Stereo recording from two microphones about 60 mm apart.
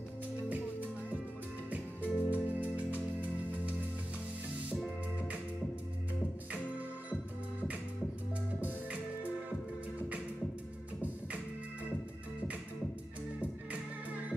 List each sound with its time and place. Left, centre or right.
1.7 s music: right
8.5 s music: right